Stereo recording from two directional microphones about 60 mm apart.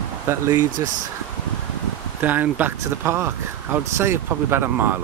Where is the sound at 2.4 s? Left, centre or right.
Right.